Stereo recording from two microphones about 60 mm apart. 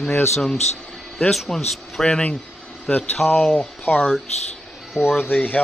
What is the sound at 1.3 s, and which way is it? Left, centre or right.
Speech, centre.